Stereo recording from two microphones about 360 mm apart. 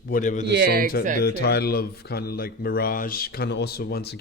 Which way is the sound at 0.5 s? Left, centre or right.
Right.